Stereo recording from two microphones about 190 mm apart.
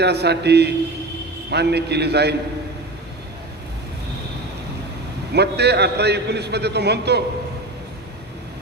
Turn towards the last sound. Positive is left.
turn(degrees=-60)  # may be behind; listen again after turning